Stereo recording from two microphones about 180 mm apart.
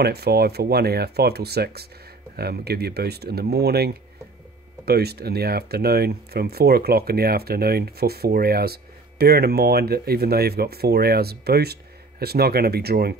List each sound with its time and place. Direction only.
0.0 s speech: 60° right (ahead or behind)